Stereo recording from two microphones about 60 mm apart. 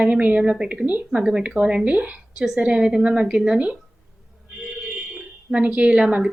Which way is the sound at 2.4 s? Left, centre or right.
Centre.